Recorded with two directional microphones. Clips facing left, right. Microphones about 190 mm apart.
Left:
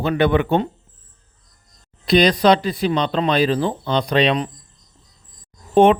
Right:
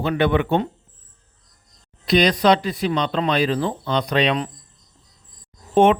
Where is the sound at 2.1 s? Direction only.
30° left (ahead or behind).